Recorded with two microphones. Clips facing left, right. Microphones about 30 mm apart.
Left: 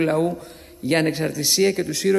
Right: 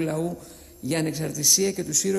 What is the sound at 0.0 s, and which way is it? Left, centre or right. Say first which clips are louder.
A man's voice: left 7 dB; left.